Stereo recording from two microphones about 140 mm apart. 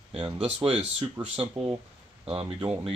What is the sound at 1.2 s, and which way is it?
Speech, 10° right (ahead or behind).